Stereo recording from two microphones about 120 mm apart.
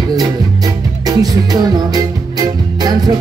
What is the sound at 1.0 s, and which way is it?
Music, 35° right (ahead or behind).